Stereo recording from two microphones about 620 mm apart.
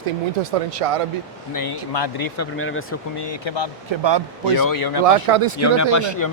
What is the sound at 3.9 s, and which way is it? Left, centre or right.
Speech, right.